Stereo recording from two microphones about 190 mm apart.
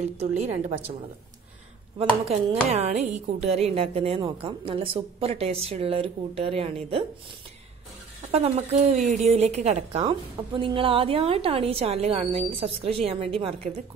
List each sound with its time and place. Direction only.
0.4 s a woman's voice: 30° right (ahead or behind)
2.7 s a woman's voice: 35° right (ahead or behind)
8.3 s a woman's voice: 35° right (ahead or behind)